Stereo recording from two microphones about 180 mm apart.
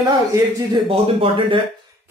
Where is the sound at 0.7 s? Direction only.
30° right (ahead or behind).